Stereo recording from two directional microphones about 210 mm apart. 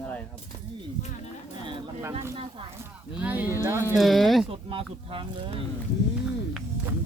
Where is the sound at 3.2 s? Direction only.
10° right (ahead or behind).